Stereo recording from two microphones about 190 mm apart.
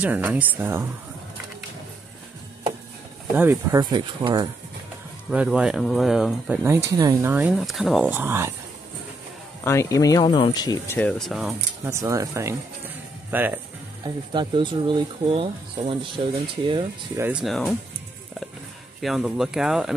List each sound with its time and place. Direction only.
0.0 s speech: 10° right (ahead or behind)
3.3 s speech: 15° right (ahead or behind)
5.3 s speech: 5° right (ahead or behind)
6.6 s speech: 15° right (ahead or behind)
7.3 s speech: 5° right (ahead or behind)
9.7 s speech: 15° left (ahead or behind)
11.0 s speech: 5° left (ahead or behind)
11.8 s speech: 15° right (ahead or behind)
14.0 s speech: 25° right (ahead or behind)
17.2 s speech: 5° right (ahead or behind)
18.9 s speech: centre (ahead or behind)